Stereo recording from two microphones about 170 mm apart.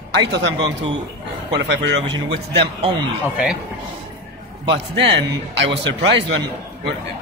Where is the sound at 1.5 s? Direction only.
90° right.